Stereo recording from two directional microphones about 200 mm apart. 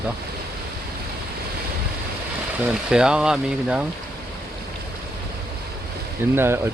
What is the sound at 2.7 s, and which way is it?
Speech, 5° right (ahead or behind).